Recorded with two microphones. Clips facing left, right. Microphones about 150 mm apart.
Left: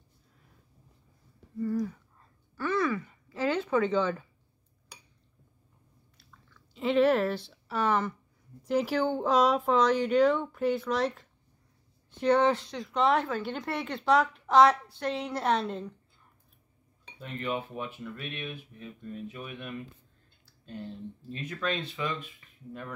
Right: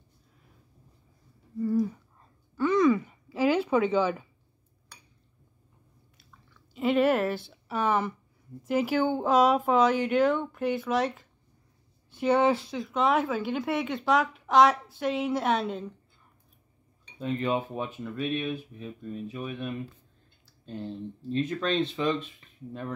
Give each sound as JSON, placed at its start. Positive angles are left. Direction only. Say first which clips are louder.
{"t": 2.5, "sound": "a sound", "louder": "right 7 dB", "side_deg": -15}
{"t": 6.5, "sound": "speech", "louder": "right 1 dB", "side_deg": -5}
{"t": 17.2, "sound": "speech", "louder": "right 6 dB", "side_deg": -25}